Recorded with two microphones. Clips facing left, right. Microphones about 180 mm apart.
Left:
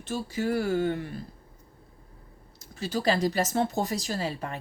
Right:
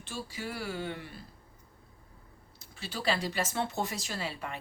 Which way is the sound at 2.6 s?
40° left (ahead or behind).